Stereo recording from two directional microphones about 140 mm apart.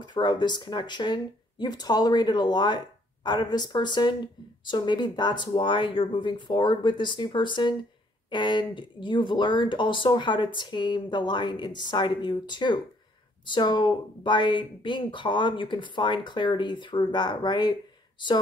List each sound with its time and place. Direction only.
0.0 s speech: 30° left (ahead or behind)